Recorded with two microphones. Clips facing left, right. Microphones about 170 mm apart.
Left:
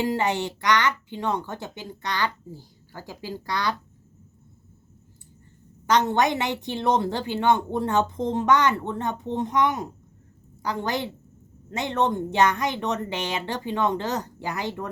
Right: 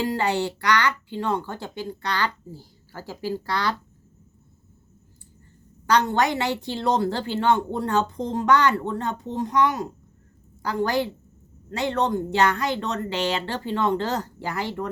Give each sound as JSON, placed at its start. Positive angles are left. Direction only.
{"t": 0.0, "sound": "a woman's voice", "side_deg": 20}
{"t": 5.8, "sound": "a woman's voice", "side_deg": 20}